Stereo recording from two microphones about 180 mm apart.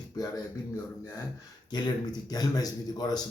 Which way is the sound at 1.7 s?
25° left (ahead or behind).